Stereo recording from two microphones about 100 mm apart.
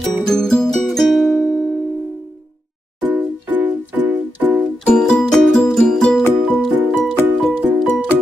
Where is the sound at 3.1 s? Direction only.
15° right (ahead or behind).